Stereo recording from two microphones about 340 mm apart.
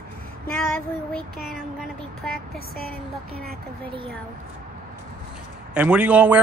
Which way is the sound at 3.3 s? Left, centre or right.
Right.